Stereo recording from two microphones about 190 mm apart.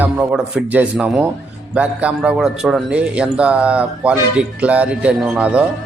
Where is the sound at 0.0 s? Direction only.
5° right (ahead or behind).